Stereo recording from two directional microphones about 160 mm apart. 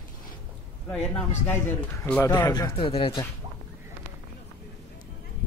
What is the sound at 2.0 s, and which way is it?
Speech, 15° left (ahead or behind).